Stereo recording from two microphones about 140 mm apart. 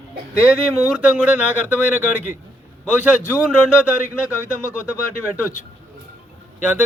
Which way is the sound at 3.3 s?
10° left (ahead or behind).